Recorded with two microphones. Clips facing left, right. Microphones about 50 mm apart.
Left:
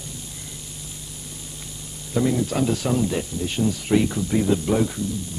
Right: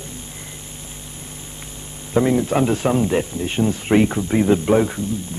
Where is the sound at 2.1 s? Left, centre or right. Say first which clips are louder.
Right 5 dB; right.